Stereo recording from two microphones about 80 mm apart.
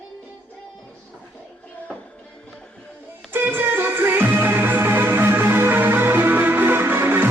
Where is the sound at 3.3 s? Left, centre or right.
Right.